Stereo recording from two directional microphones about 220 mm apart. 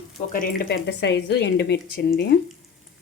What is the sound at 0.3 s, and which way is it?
Speech, 40° left (ahead or behind).